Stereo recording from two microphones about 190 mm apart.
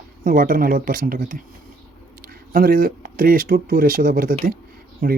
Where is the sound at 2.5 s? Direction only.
50° right (ahead or behind).